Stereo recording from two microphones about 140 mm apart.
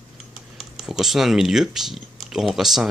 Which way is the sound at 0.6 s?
5° right (ahead or behind).